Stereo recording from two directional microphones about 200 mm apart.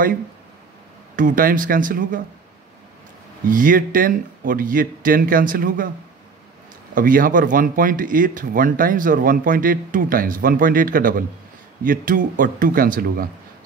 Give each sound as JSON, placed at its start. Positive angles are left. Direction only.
{"t": 1.1, "sound": "speech", "side_deg": -40}
{"t": 3.4, "sound": "speech", "side_deg": -45}
{"t": 7.0, "sound": "speech", "side_deg": -45}